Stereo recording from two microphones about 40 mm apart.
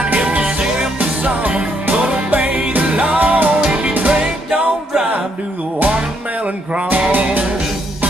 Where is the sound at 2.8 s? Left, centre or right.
Right.